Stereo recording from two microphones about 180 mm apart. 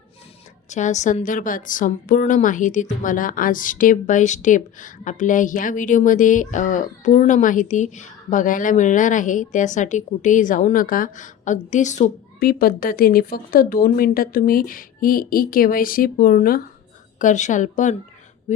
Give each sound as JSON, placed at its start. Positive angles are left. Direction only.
{"t": 0.7, "sound": "a woman's voice", "side_deg": 40}
{"t": 17.2, "sound": "a woman's voice", "side_deg": 45}